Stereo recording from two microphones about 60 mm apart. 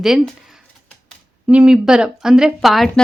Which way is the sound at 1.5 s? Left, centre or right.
Centre.